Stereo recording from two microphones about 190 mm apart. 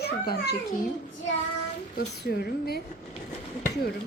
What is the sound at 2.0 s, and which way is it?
Speech, 55° left (ahead or behind).